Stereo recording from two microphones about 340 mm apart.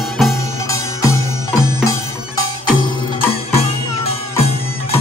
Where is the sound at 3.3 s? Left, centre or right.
Centre.